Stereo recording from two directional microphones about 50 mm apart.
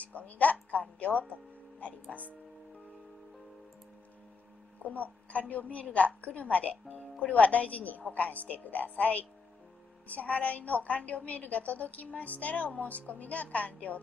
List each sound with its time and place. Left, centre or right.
0.0 s speech: left
5.3 s a woman's voice: left